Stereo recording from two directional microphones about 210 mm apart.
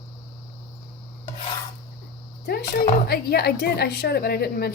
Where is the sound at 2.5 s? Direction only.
50° left (ahead or behind).